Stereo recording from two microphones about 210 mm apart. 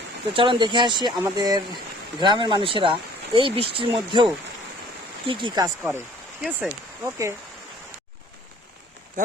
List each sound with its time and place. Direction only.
0.3 s speech: 25° right (ahead or behind)
5.3 s speech: 20° right (ahead or behind)